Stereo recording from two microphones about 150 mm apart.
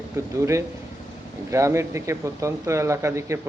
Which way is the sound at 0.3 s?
20° right (ahead or behind).